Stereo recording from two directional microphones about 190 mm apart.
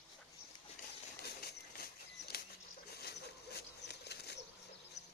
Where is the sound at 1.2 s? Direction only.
55° left (ahead or behind).